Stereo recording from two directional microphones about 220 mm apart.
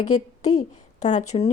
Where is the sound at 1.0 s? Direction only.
30° left (ahead or behind).